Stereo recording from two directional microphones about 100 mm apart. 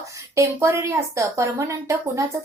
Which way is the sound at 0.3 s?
30° right (ahead or behind).